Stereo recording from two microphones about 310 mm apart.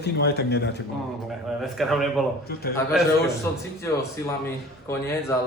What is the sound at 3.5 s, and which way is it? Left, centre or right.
Speech, centre.